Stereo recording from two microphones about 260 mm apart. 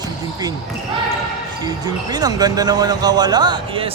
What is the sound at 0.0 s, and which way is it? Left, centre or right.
Basketball bounce, centre.